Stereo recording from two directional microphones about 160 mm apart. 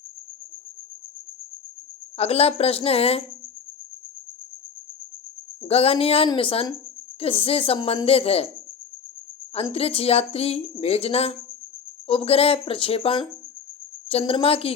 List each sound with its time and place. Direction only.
2.1 s speech: 40° left (ahead or behind)
5.6 s speech: 40° left (ahead or behind)
9.7 s speech: 40° left (ahead or behind)